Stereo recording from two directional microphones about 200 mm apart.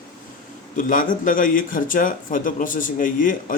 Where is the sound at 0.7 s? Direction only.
40° left (ahead or behind).